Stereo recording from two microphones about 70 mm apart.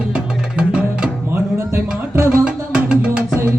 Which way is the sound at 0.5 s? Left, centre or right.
Centre.